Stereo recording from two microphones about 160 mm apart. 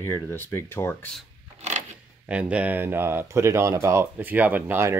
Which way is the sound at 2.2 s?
10° right (ahead or behind).